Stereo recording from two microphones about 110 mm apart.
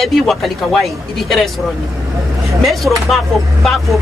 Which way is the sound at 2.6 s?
Centre (ahead or behind).